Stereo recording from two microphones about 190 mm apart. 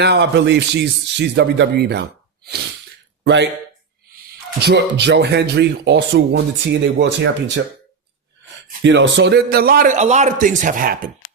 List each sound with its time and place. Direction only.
0.0 s speech: 65° right (ahead or behind)
4.6 s speech: 65° right (ahead or behind)
8.8 s a man's voice: 70° right (ahead or behind); by 11.1 s 45° right (ahead or behind)